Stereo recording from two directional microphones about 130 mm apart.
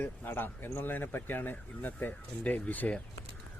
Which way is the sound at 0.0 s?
15° left (ahead or behind).